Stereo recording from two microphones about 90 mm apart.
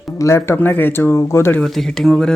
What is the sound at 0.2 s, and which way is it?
Speech, 30° left (ahead or behind).